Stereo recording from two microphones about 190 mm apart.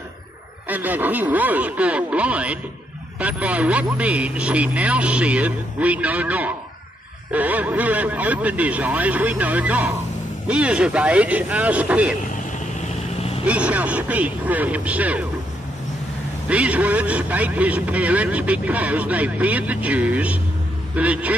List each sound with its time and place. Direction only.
0.7 s a man's voice: 10° right (ahead or behind)
12.8 s vehicle: 30° left (ahead or behind)
13.5 s a man's voice: 5° right (ahead or behind)
16.4 s a man's voice: 5° right (ahead or behind)